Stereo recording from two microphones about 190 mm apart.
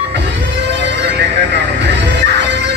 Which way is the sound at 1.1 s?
65° right (ahead or behind).